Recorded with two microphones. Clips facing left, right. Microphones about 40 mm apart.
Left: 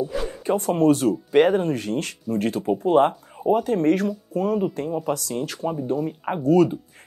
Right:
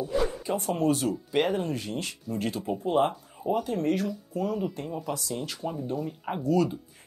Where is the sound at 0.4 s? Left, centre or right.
Left.